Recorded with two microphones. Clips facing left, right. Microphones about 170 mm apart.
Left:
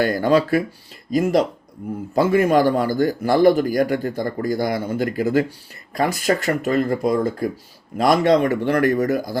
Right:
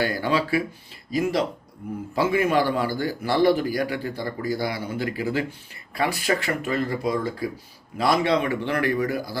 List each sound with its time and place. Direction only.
0.0 s speech: 45° left (ahead or behind)